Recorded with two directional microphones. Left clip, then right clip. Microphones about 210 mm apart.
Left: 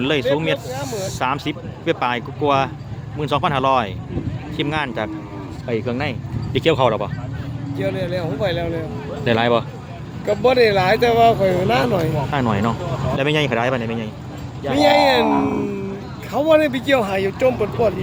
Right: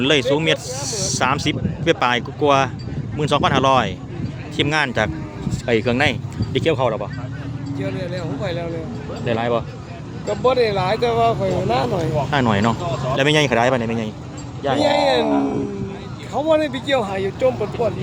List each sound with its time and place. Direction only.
0.0 s speech: 10° right (ahead or behind)
6.5 s speech: 5° left (ahead or behind)
7.8 s speech: 35° left (ahead or behind)
9.2 s speech: 15° left (ahead or behind)
10.2 s speech: 50° left (ahead or behind)
12.3 s speech: 10° right (ahead or behind)
14.8 s speech: 45° left (ahead or behind)